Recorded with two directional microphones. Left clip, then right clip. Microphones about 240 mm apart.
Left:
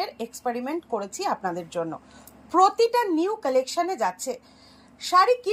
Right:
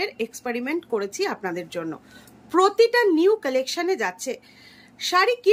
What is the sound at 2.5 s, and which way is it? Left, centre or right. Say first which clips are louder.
A woman's voice: right 1 dB; centre.